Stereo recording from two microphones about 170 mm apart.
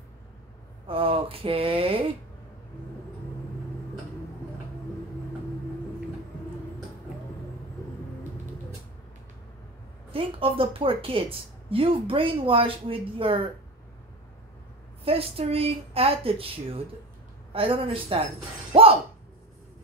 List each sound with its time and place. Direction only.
0.8 s speech: 30° right (ahead or behind)
10.1 s speech: 30° right (ahead or behind)
15.0 s speech: 35° right (ahead or behind)
18.7 s shatter: 35° right (ahead or behind)